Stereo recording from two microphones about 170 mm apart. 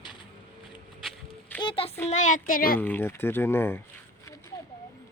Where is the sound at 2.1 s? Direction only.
45° left (ahead or behind).